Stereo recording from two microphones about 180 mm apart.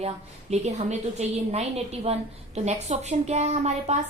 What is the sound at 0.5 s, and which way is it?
A woman's voice, 40° right (ahead or behind).